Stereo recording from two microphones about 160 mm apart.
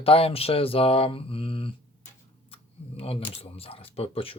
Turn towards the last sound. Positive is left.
turn(degrees=35)  # may be behind; listen again after turning